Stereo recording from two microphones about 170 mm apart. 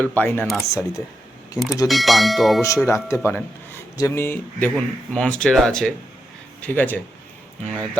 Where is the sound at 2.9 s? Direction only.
15° left (ahead or behind).